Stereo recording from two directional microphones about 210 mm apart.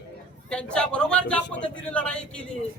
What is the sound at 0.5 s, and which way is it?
Speech, 5° left (ahead or behind).